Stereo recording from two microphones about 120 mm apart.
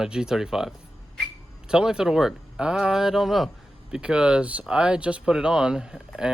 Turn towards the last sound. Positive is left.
turn(degrees=-5)  # may be behind; listen again after turning